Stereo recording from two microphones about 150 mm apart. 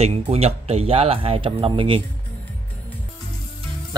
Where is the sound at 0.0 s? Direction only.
45° right (ahead or behind).